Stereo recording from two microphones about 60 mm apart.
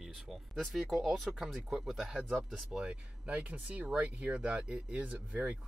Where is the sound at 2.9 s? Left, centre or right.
Right.